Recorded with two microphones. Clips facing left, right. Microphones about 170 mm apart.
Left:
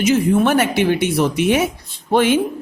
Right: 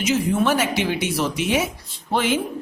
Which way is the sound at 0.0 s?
55° left (ahead or behind).